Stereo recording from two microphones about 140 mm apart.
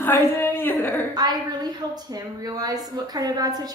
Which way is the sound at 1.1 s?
30° right (ahead or behind).